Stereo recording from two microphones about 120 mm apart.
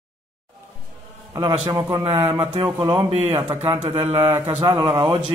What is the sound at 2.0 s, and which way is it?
Speech, 50° right (ahead or behind).